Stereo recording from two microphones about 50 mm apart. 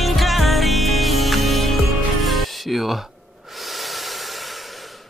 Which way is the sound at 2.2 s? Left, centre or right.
Centre.